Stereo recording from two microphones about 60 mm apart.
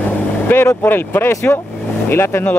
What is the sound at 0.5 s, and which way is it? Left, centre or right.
Speech, left.